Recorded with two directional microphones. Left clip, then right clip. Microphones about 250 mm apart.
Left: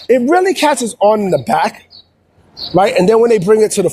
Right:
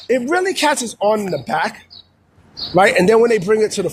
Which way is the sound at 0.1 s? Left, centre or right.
Left.